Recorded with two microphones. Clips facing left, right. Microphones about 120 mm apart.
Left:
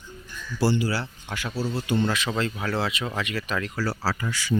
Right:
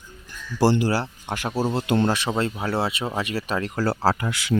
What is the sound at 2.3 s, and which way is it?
Speech, 25° right (ahead or behind).